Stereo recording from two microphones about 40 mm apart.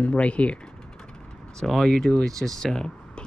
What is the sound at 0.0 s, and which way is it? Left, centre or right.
Speech, left.